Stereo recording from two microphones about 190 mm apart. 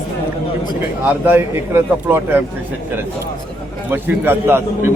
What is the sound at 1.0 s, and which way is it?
A man's voice, 10° right (ahead or behind).